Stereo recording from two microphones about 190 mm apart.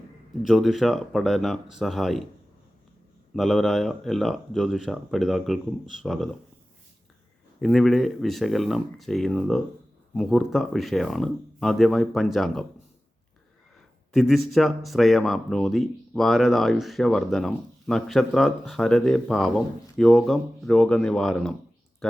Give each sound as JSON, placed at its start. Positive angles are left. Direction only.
{"t": 0.4, "sound": "speech", "side_deg": 0}
{"t": 3.3, "sound": "speech", "side_deg": 0}
{"t": 7.6, "sound": "speech", "side_deg": 0}
{"t": 14.1, "sound": "speech", "side_deg": 0}